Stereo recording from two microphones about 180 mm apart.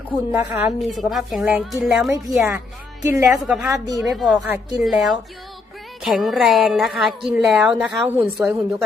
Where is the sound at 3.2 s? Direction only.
Centre (ahead or behind).